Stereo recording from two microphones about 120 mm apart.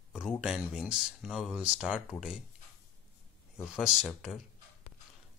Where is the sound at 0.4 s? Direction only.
5° right (ahead or behind).